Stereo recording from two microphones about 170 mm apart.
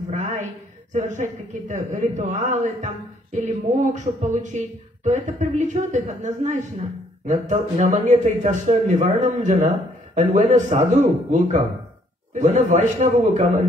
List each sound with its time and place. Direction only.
0.1 s a sound: 45° right (ahead or behind)
0.9 s a man's voice: 45° right (ahead or behind)
12.4 s a man's voice: 45° right (ahead or behind)